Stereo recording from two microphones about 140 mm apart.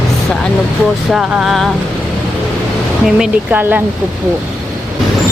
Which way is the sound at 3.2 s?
10° right (ahead or behind).